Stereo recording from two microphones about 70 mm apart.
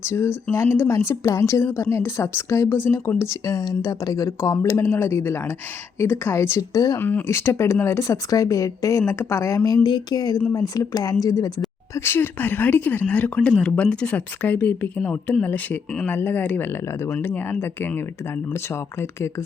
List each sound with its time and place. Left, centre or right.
0.0 s speech: left
0.9 s speech: left
4.3 s speech: left
6.7 s speech: left
7.0 s speech: left
7.3 s speech: left
9.6 s speech: left
10.5 s speech: left
11.9 s speech: left